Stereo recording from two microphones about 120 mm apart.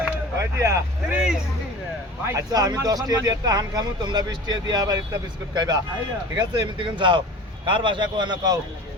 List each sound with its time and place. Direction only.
0.3 s speech: 25° right (ahead or behind)
1.1 s speech: 5° right (ahead or behind)
2.2 s speech: 30° right (ahead or behind)